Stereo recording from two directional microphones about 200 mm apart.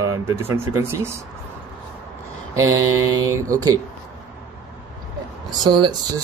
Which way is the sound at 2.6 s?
90° right.